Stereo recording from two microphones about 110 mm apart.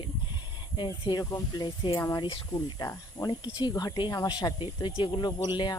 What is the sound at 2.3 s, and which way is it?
Speech, 50° left (ahead or behind).